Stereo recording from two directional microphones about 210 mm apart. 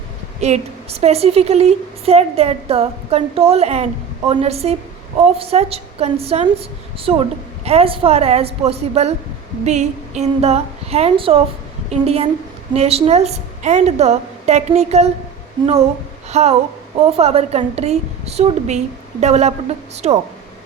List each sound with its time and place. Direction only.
0.3 s a woman's voice: 30° right (ahead or behind)